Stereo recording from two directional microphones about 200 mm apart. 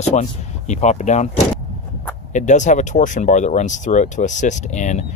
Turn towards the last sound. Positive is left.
turn(degrees=35)  # may be behind; listen again after turning